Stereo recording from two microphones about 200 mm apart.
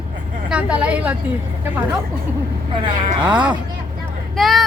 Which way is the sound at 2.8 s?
25° right (ahead or behind).